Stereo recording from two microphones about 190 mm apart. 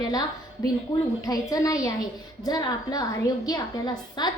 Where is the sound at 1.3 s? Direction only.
20° left (ahead or behind).